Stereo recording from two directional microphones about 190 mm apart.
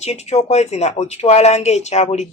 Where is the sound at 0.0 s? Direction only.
35° left (ahead or behind).